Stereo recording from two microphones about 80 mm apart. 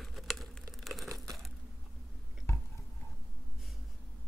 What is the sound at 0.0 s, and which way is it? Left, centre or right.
Crumpling, centre.